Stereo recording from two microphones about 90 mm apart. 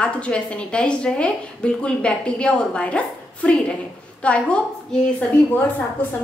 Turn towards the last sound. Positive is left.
turn(degrees=20)  # may be behind; listen again after turning